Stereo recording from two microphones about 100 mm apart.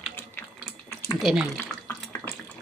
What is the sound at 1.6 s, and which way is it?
Water tap, 20° left (ahead or behind).